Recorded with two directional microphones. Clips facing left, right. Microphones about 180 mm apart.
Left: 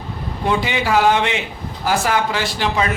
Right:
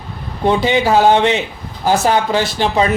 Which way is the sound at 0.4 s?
30° right (ahead or behind).